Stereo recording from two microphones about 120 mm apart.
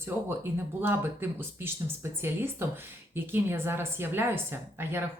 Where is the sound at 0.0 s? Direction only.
20° right (ahead or behind).